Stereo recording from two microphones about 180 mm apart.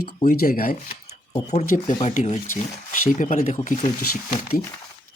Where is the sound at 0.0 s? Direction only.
55° left (ahead or behind).